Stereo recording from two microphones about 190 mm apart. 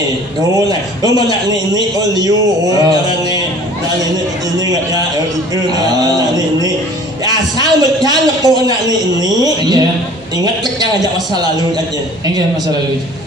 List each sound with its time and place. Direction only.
0.7 s a man's voice: 20° right (ahead or behind)
5.5 s a man's voice: 20° right (ahead or behind)